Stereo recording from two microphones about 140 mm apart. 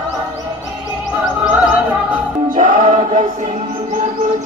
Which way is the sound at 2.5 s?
75° right (ahead or behind).